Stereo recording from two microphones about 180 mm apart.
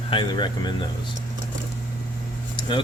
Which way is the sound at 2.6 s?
25° left (ahead or behind).